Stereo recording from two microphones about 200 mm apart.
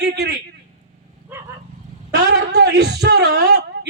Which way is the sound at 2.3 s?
55° right (ahead or behind).